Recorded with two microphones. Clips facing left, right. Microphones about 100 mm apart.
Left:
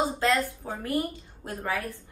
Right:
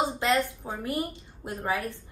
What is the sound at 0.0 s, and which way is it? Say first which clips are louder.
A woman's voice: even; 20° right (ahead or behind).